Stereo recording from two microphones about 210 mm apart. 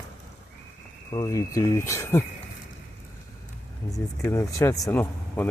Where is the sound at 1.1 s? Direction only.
15° left (ahead or behind).